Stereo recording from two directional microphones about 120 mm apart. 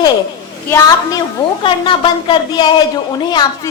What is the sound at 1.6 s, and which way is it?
A woman's voice, 45° left (ahead or behind).